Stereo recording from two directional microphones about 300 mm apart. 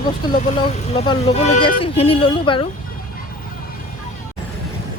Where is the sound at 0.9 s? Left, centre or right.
Centre.